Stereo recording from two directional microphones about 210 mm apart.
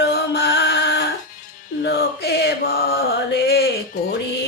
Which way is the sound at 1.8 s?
55° left (ahead or behind).